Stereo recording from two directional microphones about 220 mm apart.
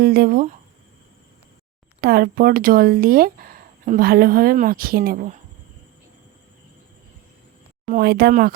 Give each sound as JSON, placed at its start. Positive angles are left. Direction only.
{"t": 0.0, "sound": "speech", "side_deg": -45}
{"t": 2.0, "sound": "speech", "side_deg": -45}
{"t": 7.9, "sound": "speech", "side_deg": -40}